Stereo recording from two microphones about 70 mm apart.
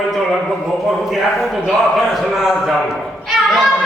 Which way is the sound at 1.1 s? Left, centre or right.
Centre.